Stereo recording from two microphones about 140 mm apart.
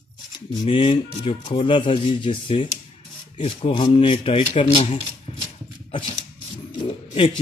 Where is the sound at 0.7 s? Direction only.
40° left (ahead or behind).